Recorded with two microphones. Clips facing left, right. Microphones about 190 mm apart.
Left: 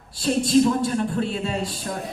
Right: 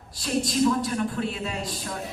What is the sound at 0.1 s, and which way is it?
A man's voice, 30° left (ahead or behind).